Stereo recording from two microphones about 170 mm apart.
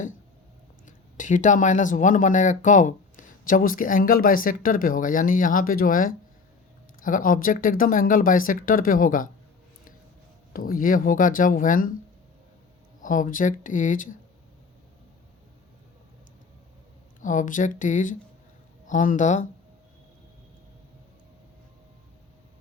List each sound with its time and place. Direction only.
0.9 s speech: 50° left (ahead or behind)
10.5 s speech: 55° left (ahead or behind)
13.0 s speech: 50° left (ahead or behind)
17.2 s speech: 50° left (ahead or behind)